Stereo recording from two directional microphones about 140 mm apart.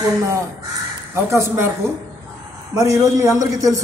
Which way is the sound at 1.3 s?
20° right (ahead or behind).